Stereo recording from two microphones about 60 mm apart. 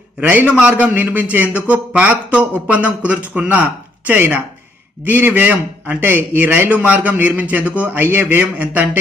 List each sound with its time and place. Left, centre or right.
0.2 s a man's voice: right